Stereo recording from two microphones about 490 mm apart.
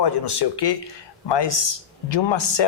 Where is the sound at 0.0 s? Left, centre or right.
Left.